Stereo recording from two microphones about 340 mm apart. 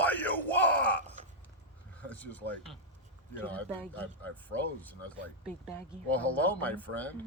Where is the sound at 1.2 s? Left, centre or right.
Right.